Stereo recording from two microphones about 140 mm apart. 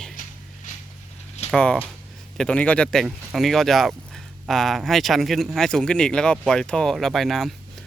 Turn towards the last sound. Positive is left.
turn(degrees=0)  # may be behind; listen again after turning